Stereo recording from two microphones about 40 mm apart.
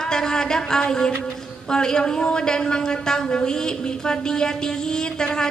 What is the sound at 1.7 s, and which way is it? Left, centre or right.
A woman's voice, centre.